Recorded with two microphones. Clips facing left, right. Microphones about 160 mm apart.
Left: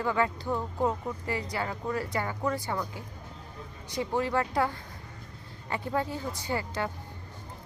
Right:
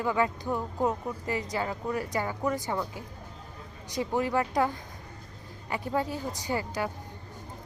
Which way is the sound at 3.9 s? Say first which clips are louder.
Right 1 dB; 15° right (ahead or behind).